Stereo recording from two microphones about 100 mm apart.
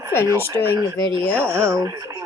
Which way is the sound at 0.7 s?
60° right (ahead or behind).